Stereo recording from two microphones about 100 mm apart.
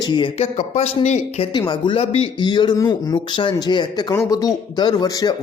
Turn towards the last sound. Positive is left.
turn(degrees=40)  # may be behind; listen again after turning